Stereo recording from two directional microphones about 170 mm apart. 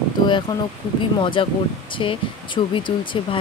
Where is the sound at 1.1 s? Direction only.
30° left (ahead or behind).